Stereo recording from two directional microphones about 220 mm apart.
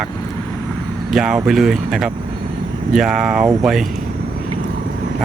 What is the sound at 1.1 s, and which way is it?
Speech, 5° right (ahead or behind).